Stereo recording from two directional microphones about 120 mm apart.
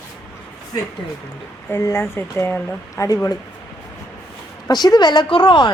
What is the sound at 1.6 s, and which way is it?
Speech, 20° left (ahead or behind).